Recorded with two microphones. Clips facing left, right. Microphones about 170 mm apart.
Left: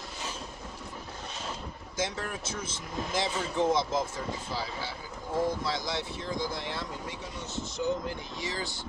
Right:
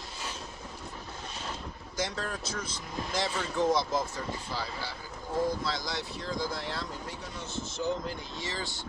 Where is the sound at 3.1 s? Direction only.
20° left (ahead or behind).